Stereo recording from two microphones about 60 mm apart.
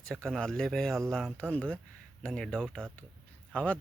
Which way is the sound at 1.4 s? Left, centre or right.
Centre.